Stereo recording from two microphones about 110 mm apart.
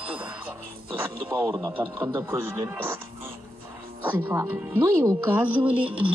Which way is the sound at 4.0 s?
15° right (ahead or behind).